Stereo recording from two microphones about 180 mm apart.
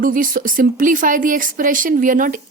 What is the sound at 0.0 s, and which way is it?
A woman's voice, 50° right (ahead or behind).